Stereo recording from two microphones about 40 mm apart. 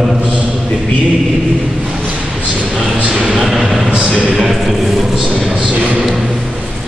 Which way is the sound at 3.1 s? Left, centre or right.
Centre.